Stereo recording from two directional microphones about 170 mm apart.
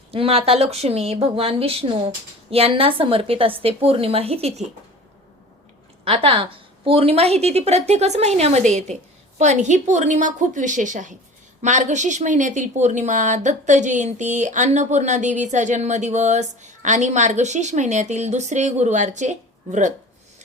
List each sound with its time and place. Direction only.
0.1 s a woman's voice: 35° right (ahead or behind)
6.1 s a woman's voice: 35° right (ahead or behind)